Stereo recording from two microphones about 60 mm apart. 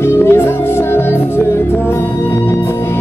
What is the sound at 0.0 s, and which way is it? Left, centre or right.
Music, left.